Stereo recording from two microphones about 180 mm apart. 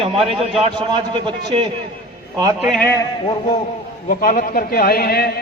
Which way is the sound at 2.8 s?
15° left (ahead or behind).